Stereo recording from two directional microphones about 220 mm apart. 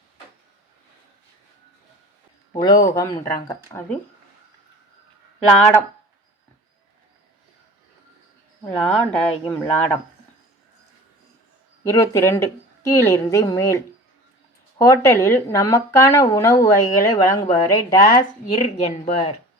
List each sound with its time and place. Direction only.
2.5 s speech: 20° left (ahead or behind)
8.6 s speech: 5° left (ahead or behind)
11.8 s speech: 15° left (ahead or behind)